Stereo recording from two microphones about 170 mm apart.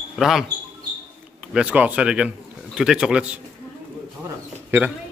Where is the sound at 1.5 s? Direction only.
5° right (ahead or behind).